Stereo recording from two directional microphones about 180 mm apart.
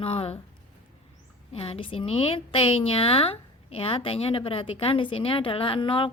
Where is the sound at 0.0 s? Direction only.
35° left (ahead or behind).